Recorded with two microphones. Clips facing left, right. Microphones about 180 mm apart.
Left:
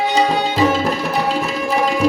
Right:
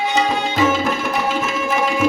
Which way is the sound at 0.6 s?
35° left (ahead or behind).